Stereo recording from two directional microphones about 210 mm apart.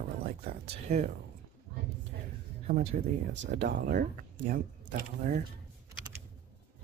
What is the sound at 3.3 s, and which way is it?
Speech, 55° right (ahead or behind).